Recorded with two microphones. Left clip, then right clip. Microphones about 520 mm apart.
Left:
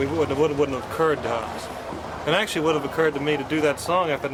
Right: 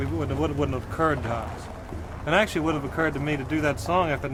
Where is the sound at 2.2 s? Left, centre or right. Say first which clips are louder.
Left 1 dB; right.